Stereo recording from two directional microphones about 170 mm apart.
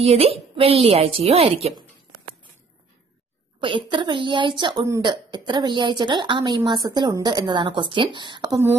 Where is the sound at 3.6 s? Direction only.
30° right (ahead or behind).